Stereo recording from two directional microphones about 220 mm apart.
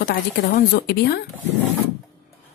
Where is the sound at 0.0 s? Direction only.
45° left (ahead or behind).